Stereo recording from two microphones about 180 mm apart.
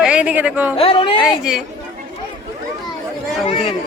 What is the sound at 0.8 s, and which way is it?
Speech, 30° left (ahead or behind).